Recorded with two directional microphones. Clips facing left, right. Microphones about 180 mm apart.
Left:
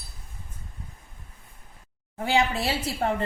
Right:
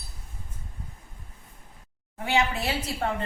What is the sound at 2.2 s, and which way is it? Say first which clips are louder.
Speech: left 2 dB; 35° left (ahead or behind).